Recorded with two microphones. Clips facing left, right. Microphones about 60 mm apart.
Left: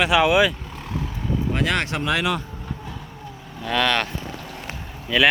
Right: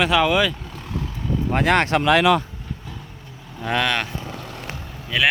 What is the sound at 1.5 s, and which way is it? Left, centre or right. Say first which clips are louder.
Speech: right 7 dB; right.